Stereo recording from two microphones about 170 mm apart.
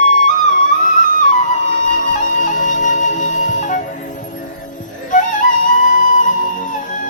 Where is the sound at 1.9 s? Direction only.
50° left (ahead or behind).